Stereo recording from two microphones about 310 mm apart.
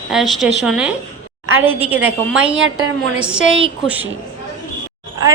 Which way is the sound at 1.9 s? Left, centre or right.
Centre.